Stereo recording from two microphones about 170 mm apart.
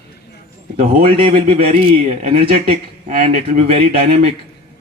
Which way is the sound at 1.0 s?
35° right (ahead or behind).